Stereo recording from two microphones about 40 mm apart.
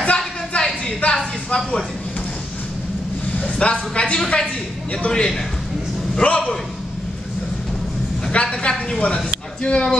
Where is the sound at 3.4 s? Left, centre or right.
Left.